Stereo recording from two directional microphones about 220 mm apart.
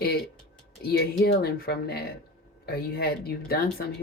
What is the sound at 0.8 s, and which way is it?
Speech, 45° left (ahead or behind).